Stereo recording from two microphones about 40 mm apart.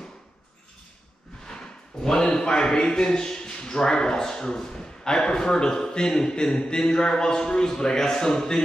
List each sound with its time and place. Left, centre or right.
2.0 s a man's voice: centre